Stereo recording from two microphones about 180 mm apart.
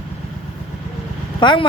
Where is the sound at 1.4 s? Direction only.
25° left (ahead or behind).